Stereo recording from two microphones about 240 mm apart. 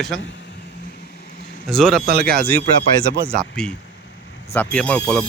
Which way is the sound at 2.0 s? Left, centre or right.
Right.